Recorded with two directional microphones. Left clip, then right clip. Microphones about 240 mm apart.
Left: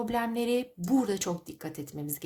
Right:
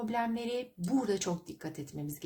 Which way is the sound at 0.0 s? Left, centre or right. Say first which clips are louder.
Left 4 dB; left.